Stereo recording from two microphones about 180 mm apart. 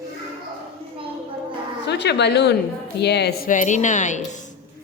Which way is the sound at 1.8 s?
70° left (ahead or behind).